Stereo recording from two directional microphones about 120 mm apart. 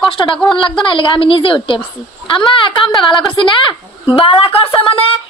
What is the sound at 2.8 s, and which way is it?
Speech, centre (ahead or behind).